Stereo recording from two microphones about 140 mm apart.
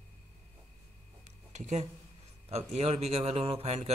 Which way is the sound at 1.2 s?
60° right (ahead or behind).